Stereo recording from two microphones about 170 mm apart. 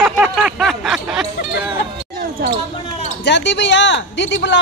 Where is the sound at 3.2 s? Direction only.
90° left.